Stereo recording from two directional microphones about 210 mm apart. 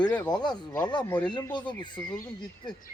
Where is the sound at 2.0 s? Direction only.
5° left (ahead or behind).